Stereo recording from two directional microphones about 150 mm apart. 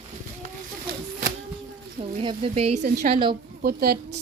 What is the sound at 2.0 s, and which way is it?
A woman's voice, 40° right (ahead or behind).